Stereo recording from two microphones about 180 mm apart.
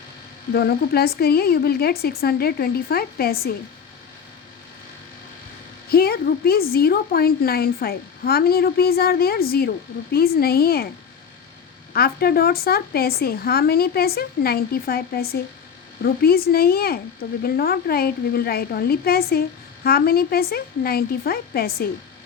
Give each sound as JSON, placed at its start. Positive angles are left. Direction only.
{"t": 0.5, "sound": "a woman's voice", "side_deg": 60}
{"t": 5.9, "sound": "a woman's voice", "side_deg": 60}
{"t": 11.9, "sound": "a woman's voice", "side_deg": 60}